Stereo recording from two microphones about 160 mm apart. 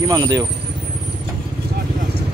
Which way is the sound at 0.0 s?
25° right (ahead or behind).